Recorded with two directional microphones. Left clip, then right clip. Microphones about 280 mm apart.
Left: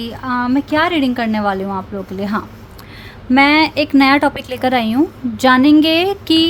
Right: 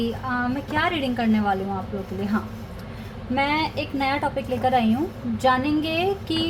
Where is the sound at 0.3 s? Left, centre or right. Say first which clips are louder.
Left 11 dB; left.